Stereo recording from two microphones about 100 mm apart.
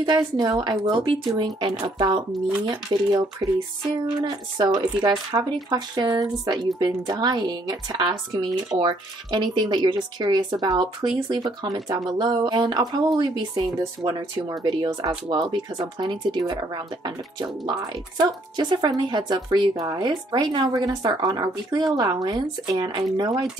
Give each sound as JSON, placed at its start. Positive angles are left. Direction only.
{"t": 0.0, "sound": "speech", "side_deg": -45}
{"t": 1.0, "sound": "speech", "side_deg": -60}
{"t": 1.8, "sound": "speech", "side_deg": -45}